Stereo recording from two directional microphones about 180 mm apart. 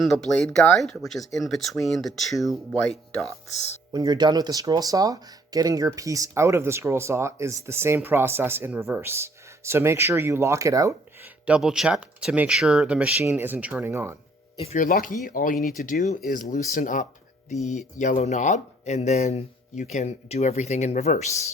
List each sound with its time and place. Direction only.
0.0 s speech: centre (ahead or behind)
3.9 s speech: 20° right (ahead or behind)
11.4 s speech: 5° right (ahead or behind)
14.5 s speech: 35° left (ahead or behind)
14.8 s speech: 50° left (ahead or behind)
15.5 s speech: centre (ahead or behind)
15.8 s speech: 45° left (ahead or behind)